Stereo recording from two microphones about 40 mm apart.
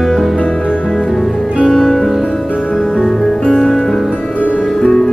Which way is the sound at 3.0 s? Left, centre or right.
Centre.